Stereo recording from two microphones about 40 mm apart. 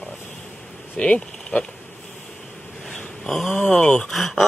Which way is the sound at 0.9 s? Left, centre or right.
Left.